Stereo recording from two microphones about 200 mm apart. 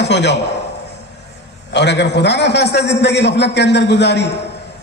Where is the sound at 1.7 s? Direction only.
60° left (ahead or behind).